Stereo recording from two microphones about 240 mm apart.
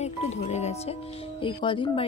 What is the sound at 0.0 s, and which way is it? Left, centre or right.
A woman's voice, left.